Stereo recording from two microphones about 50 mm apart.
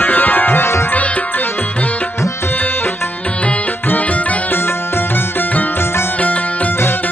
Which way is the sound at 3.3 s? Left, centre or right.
Left.